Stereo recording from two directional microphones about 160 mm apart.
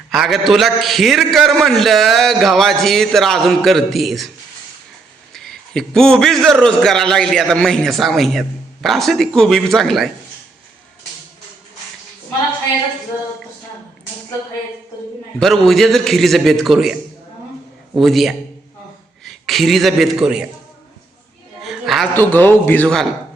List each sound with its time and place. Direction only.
0.1 s a man's voice: centre (ahead or behind)
5.3 s a man's voice: centre (ahead or behind)
15.4 s a man's voice: centre (ahead or behind)
18.0 s a man's voice: centre (ahead or behind)
21.6 s a sound: centre (ahead or behind)
22.1 s a man's voice: 10° left (ahead or behind)